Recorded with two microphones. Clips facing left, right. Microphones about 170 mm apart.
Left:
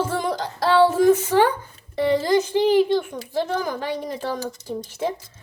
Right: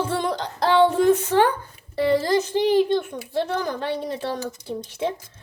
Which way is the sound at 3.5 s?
10° left (ahead or behind).